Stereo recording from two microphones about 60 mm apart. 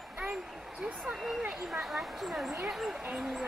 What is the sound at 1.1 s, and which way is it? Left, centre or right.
Speech, centre.